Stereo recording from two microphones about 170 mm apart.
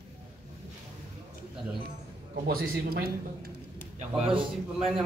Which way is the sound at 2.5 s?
65° right (ahead or behind).